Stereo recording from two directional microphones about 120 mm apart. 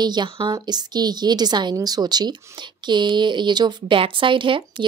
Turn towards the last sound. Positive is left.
turn(degrees=-45)  # may be behind; listen again after turning